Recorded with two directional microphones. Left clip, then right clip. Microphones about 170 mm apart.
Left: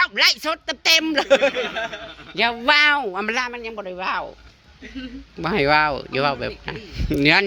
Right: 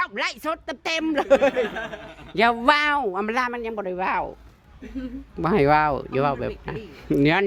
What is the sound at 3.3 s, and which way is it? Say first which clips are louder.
Speech: right 1 dB; 40° right (ahead or behind).